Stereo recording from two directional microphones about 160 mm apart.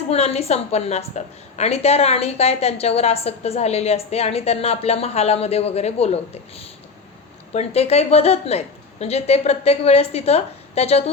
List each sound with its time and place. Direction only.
0.1 s a woman's voice: 40° left (ahead or behind)
7.5 s a woman's voice: 40° left (ahead or behind)